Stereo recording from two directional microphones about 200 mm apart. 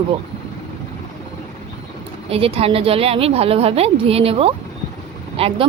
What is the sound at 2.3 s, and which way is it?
A woman's voice, 30° right (ahead or behind).